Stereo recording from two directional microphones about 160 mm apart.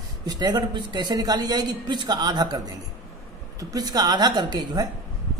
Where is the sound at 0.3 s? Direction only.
25° right (ahead or behind).